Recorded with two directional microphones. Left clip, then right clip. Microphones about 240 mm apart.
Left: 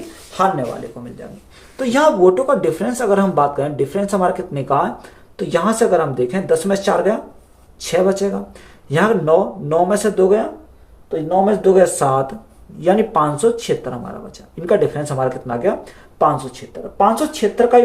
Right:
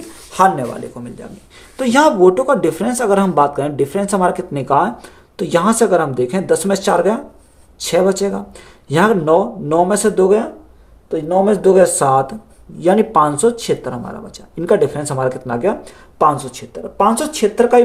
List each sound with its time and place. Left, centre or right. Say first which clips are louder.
1.7 s speech: right 2 dB; right